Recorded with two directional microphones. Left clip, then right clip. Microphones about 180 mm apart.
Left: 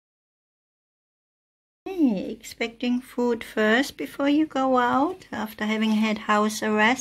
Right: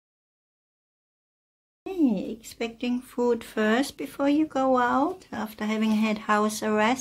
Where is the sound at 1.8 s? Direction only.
5° left (ahead or behind).